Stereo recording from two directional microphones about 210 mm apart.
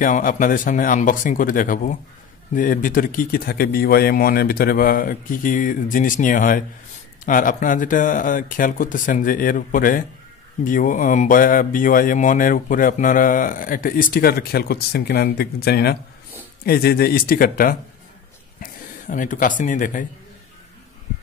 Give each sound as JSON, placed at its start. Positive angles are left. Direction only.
{"t": 0.0, "sound": "speech", "side_deg": 40}